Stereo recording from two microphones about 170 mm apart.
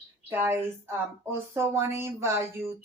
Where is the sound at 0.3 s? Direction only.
15° right (ahead or behind).